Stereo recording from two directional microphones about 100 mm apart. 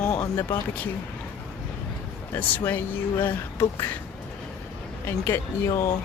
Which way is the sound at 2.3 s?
20° left (ahead or behind).